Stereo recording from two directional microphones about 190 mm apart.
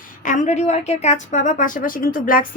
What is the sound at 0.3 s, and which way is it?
A woman's voice, 40° left (ahead or behind).